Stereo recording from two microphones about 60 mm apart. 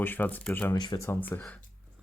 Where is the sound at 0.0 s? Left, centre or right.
Left.